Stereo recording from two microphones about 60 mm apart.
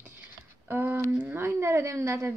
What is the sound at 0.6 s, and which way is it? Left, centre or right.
A woman's voice, right.